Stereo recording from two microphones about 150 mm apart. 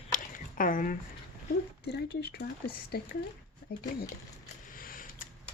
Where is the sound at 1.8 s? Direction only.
90° left.